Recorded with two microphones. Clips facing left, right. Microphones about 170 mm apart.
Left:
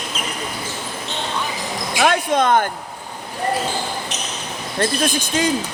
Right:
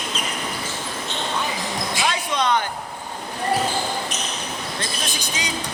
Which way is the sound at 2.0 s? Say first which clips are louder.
Left 8 dB; 55° left (ahead or behind).